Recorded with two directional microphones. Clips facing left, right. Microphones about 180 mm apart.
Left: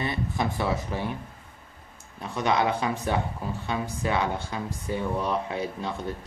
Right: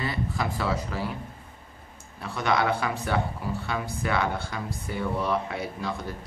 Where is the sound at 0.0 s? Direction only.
20° left (ahead or behind).